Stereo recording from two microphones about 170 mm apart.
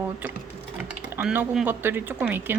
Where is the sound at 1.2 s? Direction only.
5° right (ahead or behind).